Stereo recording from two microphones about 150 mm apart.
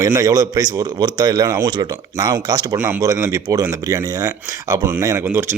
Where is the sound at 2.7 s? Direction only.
15° right (ahead or behind).